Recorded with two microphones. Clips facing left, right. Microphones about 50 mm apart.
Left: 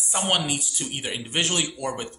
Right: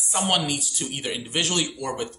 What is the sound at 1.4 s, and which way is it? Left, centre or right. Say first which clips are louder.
Speech: even; centre.